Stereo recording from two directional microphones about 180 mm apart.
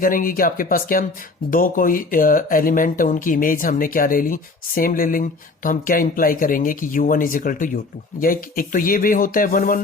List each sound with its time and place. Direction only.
0.0 s speech: 50° left (ahead or behind)